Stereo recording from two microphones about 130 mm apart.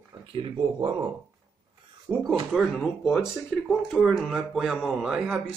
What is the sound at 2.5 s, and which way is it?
Speech, 5° left (ahead or behind).